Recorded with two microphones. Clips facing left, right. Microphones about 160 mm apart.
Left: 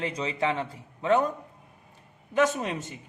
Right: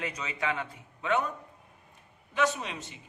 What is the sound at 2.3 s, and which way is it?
Speech, 45° left (ahead or behind).